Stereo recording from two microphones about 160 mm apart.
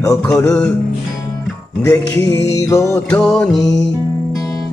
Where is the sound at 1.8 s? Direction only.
20° left (ahead or behind).